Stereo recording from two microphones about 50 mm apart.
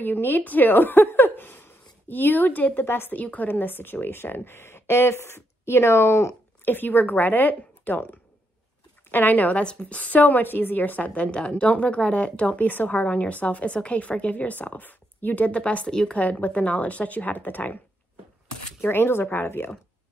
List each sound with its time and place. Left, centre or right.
0.0 s a woman's voice: left
3.2 s speech: left
6.6 s speech: left
9.6 s a woman's voice: left
10.2 s speech: left
11.1 s a woman's voice: left
16.2 s speech: left
18.8 s speech: left